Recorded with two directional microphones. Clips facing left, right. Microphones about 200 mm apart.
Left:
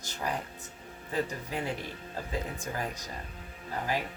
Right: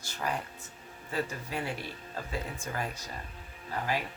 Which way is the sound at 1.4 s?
20° left (ahead or behind).